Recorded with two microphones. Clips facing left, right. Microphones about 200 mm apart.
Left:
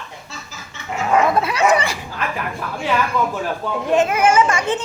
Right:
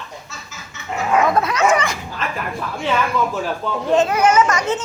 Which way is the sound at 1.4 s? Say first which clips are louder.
Even; 30° left (ahead or behind).